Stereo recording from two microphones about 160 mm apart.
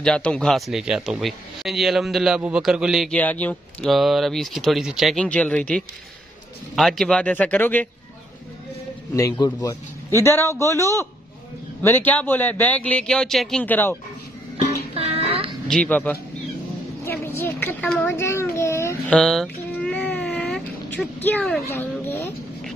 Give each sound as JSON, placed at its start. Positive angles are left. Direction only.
{"t": 0.0, "sound": "a man's voice", "side_deg": 5}
{"t": 3.2, "sound": "a man's voice", "side_deg": 10}
{"t": 9.1, "sound": "a man's voice", "side_deg": 20}
{"t": 15.0, "sound": "music", "side_deg": -40}
{"t": 15.7, "sound": "a woman's voice", "side_deg": 10}
{"t": 18.1, "sound": "speech", "side_deg": 15}
{"t": 18.6, "sound": "a sound", "side_deg": 15}
{"t": 19.0, "sound": "a sound", "side_deg": 5}
{"t": 21.6, "sound": "speech", "side_deg": 15}